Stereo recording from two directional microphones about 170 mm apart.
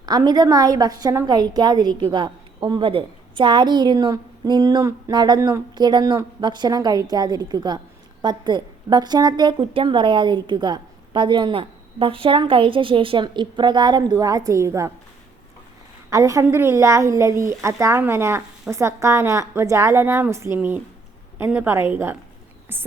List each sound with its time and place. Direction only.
0.0 s a woman's voice: 25° right (ahead or behind)
16.0 s a woman's voice: 20° right (ahead or behind)